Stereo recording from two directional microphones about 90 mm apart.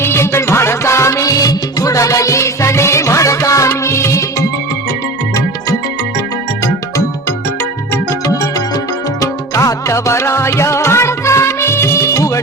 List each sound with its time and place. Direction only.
0.0 s music: 25° left (ahead or behind)
6.6 s music: 30° left (ahead or behind)
9.2 s music: 35° left (ahead or behind)